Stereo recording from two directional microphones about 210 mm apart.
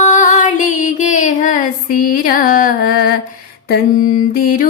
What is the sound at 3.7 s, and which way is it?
Mantra, 40° left (ahead or behind).